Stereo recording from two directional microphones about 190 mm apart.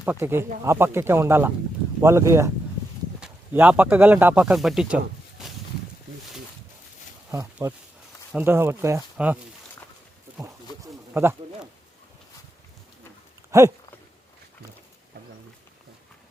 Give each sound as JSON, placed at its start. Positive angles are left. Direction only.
{"t": 0.0, "sound": "speech", "side_deg": -15}
{"t": 7.3, "sound": "speech", "side_deg": -15}
{"t": 11.1, "sound": "speech", "side_deg": -10}
{"t": 13.5, "sound": "speech", "side_deg": -15}